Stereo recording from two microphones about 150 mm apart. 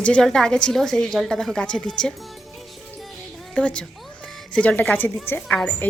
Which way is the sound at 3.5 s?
5° left (ahead or behind).